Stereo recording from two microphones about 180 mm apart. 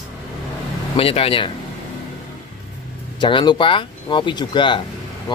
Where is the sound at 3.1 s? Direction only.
25° left (ahead or behind).